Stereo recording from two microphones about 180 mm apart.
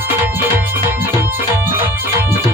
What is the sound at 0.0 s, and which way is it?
Music, 10° right (ahead or behind).